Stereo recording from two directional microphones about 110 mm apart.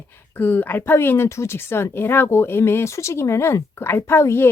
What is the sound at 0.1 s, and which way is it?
Speech, 20° left (ahead or behind).